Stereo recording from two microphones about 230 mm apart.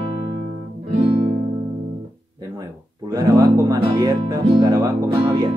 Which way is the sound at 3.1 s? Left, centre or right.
Centre.